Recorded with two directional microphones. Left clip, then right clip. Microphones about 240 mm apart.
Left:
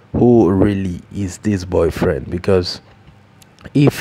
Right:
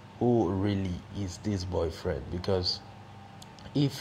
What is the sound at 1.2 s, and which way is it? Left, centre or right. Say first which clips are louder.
Speech: left 14 dB; left.